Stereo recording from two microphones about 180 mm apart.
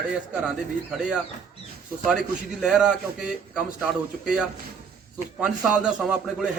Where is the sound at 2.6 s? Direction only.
5° right (ahead or behind).